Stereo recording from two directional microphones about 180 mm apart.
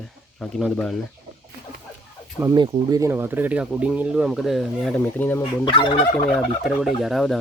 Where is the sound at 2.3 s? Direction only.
20° right (ahead or behind); by 5.4 s 10° left (ahead or behind).